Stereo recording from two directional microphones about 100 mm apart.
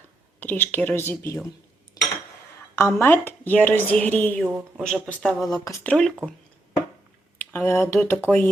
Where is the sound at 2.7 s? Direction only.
25° left (ahead or behind).